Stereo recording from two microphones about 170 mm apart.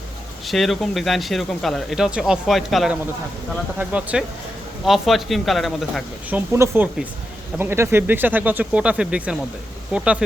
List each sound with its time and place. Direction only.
0.4 s speech: centre (ahead or behind)
6.3 s speech: 15° right (ahead or behind)